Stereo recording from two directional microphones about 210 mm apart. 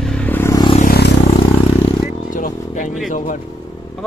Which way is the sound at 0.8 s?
50° left (ahead or behind).